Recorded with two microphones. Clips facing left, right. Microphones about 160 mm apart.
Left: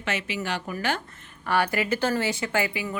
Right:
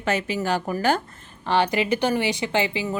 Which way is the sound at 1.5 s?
25° right (ahead or behind).